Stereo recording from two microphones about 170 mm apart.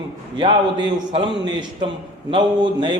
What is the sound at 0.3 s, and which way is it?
A man's voice, 25° right (ahead or behind).